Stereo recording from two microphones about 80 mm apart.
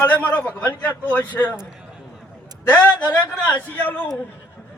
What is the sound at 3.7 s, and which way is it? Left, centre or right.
Speech, left.